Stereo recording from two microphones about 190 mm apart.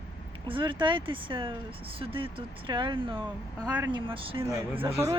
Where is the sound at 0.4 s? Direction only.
25° right (ahead or behind).